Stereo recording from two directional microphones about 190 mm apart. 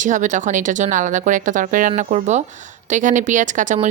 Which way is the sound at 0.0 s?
40° right (ahead or behind).